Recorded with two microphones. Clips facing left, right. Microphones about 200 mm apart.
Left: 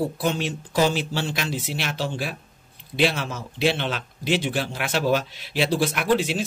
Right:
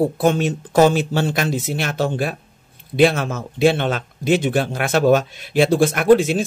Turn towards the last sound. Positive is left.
turn(degrees=-50)  # may be behind; listen again after turning